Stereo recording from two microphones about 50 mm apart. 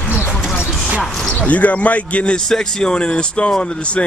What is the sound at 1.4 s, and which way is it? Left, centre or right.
Speech, left.